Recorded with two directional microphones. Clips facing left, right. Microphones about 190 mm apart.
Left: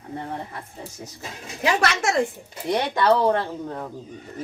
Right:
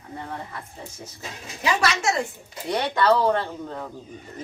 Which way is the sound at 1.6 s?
55° left (ahead or behind).